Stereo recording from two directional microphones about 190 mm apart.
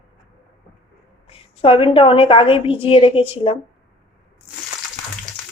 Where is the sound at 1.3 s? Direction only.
30° left (ahead or behind).